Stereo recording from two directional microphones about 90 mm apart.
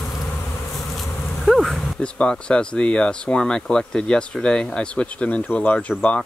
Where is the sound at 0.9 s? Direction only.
Centre (ahead or behind).